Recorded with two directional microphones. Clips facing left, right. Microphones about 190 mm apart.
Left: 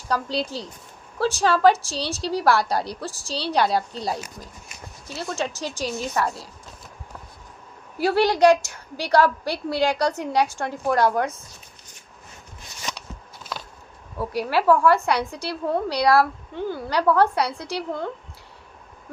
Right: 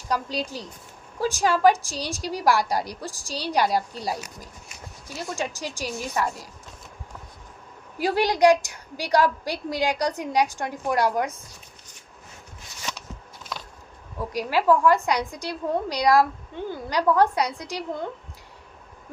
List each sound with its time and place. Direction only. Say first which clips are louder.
0.1 s a woman's voice: left 2 dB; 15° right (ahead or behind)
7.9 s a woman's voice: left 3 dB; 15° right (ahead or behind)
12.9 s a sound: left 1 dB; 15° left (ahead or behind)
14.3 s a woman's voice: left 1 dB; 15° right (ahead or behind)